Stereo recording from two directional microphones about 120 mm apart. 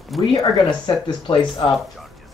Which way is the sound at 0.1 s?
Centre (ahead or behind).